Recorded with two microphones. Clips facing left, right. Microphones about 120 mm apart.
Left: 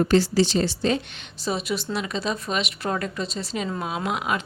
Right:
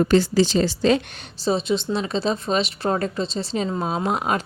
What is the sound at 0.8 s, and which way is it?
Speech, 90° right.